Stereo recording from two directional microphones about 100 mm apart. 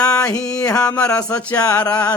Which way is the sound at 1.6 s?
35° left (ahead or behind).